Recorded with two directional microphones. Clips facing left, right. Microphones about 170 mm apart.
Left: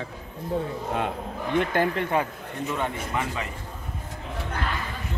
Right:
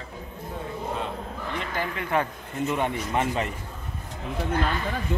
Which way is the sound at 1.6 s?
55° left (ahead or behind).